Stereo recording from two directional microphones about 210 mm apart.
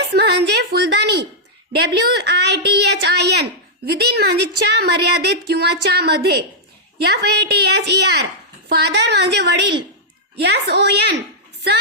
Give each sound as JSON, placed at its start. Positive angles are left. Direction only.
{"t": 0.1, "sound": "a woman's voice", "side_deg": -50}